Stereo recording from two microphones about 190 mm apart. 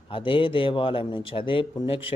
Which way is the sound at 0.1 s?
25° left (ahead or behind).